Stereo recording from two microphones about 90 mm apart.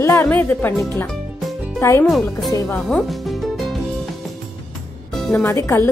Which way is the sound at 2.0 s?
Centre (ahead or behind).